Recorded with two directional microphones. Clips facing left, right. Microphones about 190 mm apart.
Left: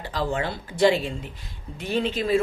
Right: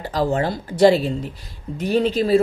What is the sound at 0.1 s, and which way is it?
Speech, 40° right (ahead or behind).